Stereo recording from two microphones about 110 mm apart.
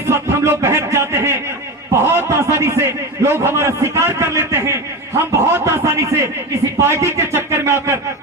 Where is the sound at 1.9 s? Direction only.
25° right (ahead or behind).